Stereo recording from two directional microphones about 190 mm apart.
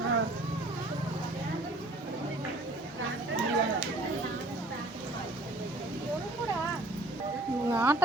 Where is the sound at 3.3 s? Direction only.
80° right.